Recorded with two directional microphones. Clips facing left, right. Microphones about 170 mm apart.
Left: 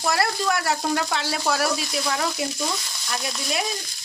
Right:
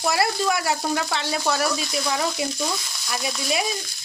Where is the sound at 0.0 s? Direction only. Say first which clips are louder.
Right 1 dB; 5° right (ahead or behind).